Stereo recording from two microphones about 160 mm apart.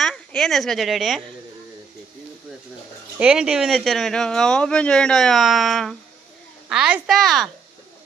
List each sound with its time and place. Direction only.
0.0 s a woman's voice: centre (ahead or behind)
3.2 s speech: 5° right (ahead or behind)